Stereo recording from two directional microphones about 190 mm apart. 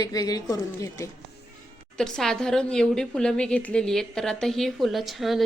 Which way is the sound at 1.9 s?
5° left (ahead or behind).